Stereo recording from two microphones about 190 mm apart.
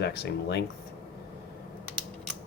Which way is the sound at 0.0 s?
60° left (ahead or behind).